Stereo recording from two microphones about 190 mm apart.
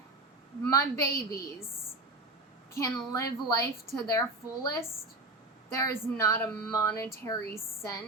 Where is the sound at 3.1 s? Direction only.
15° left (ahead or behind).